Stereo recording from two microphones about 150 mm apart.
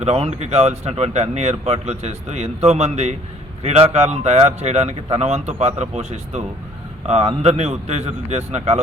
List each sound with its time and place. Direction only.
0.0 s speech: 45° right (ahead or behind)